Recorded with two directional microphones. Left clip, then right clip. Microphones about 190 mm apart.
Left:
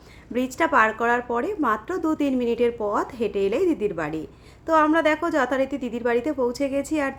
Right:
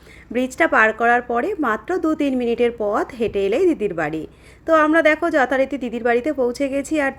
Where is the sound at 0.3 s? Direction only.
20° right (ahead or behind).